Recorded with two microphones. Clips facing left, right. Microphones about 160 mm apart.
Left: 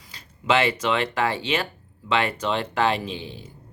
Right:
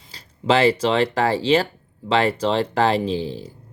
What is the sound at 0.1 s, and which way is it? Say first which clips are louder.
Speech: right 3 dB; 35° right (ahead or behind).